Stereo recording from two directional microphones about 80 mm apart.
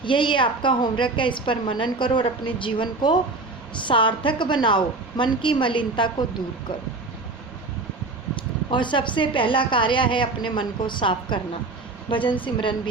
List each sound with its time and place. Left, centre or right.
0.0 s a woman's voice: left
3.8 s a woman's voice: left
8.4 s a woman's voice: left